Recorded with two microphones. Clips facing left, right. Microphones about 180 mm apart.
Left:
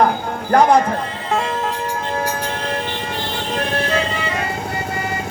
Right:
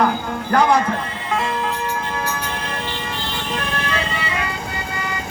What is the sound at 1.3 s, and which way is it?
Music, 45° left (ahead or behind).